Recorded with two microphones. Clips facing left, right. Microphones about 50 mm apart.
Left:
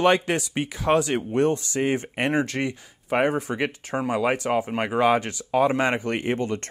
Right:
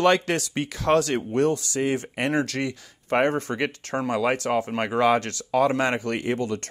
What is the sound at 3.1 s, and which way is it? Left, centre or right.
Speech, centre.